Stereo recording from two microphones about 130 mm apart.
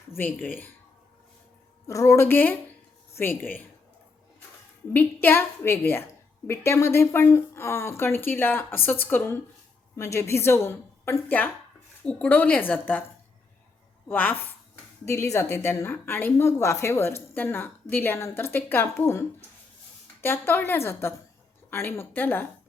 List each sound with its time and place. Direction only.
0.2 s a woman's voice: 15° left (ahead or behind)
1.9 s a woman's voice: 25° left (ahead or behind)
4.9 s a woman's voice: 15° left (ahead or behind)
14.1 s a woman's voice: 15° left (ahead or behind)
20.2 s a woman's voice: 15° left (ahead or behind)